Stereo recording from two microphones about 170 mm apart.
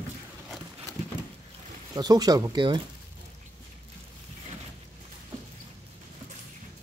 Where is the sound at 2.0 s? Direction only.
25° right (ahead or behind).